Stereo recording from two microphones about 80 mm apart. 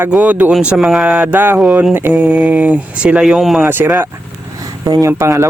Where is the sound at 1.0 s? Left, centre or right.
Centre.